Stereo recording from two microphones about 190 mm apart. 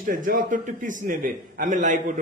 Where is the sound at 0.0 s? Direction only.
45° right (ahead or behind).